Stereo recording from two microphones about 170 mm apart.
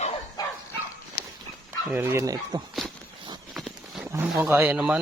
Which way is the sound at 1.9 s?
10° right (ahead or behind).